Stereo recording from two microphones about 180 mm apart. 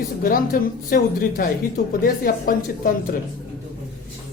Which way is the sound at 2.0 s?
50° left (ahead or behind).